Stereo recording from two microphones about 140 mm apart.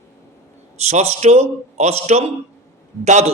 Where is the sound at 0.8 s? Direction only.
55° right (ahead or behind).